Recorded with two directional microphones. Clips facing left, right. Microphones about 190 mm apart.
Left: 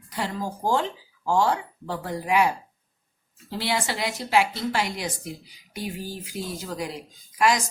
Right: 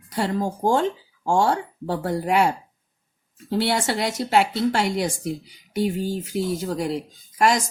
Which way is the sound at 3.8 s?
60° right (ahead or behind).